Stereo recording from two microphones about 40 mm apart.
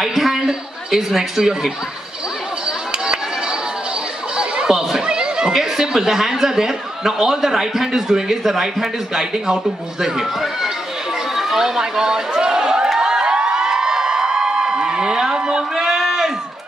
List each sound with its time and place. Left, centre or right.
0.0 s a man's voice: centre
4.4 s chatter: centre
5.5 s a man's voice: centre
11.3 s a sound: centre
12.9 s crowd: centre